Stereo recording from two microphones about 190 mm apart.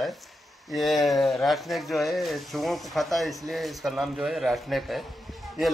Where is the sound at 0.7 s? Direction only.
Centre (ahead or behind).